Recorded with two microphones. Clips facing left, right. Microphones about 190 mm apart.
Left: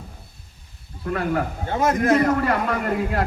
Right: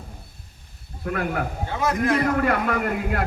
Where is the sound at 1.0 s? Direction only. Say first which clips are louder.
Left 2 dB; 40° left (ahead or behind).